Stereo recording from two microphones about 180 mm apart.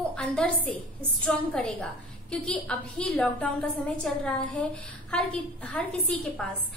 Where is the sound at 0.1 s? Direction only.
5° left (ahead or behind).